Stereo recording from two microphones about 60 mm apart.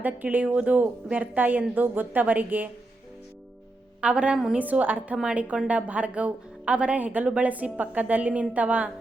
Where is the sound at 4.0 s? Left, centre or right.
Centre.